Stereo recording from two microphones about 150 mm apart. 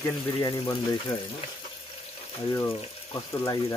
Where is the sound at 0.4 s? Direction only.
25° left (ahead or behind).